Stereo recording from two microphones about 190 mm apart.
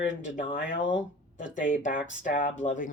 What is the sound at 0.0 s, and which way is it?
Speech, 40° left (ahead or behind).